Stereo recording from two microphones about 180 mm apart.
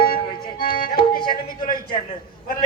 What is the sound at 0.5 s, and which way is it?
Speech, 25° left (ahead or behind).